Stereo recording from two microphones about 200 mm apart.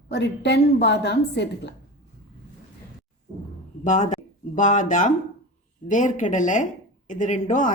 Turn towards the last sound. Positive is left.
turn(degrees=40)  # may be behind; listen again after turning